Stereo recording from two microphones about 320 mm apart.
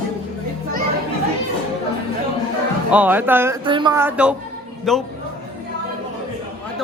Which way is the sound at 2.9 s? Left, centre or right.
Centre.